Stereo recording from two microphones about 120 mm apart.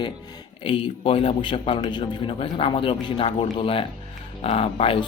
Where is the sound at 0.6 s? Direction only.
45° left (ahead or behind).